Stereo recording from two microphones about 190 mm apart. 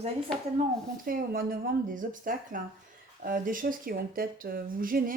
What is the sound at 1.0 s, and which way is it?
Speech, 50° right (ahead or behind).